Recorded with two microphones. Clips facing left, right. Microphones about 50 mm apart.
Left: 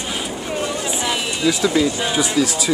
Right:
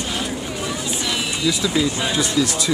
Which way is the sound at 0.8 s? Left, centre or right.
Centre.